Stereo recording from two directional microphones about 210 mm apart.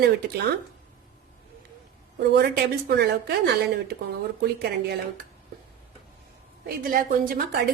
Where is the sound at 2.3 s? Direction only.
50° right (ahead or behind).